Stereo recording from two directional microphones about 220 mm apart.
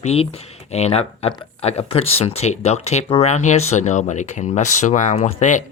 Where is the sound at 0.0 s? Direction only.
25° left (ahead or behind).